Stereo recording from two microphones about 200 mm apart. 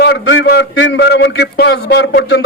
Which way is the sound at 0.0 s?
60° left (ahead or behind).